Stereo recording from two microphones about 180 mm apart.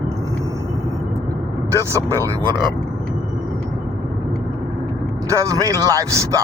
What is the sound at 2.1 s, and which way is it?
Speech, 15° right (ahead or behind).